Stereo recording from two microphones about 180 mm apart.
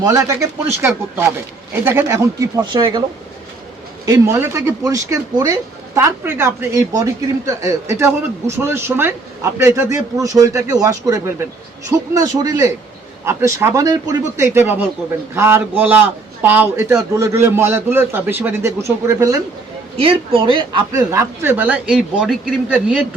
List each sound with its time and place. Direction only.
0.0 s speech: 15° right (ahead or behind)
4.0 s a woman's voice: 15° right (ahead or behind)
20.0 s a woman's voice: 30° right (ahead or behind)
21.1 s a man's voice: 15° right (ahead or behind)